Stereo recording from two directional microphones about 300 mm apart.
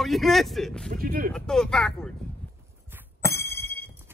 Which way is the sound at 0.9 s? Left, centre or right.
Right.